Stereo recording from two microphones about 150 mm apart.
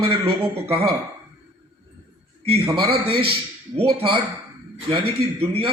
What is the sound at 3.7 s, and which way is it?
A man's voice, 40° right (ahead or behind).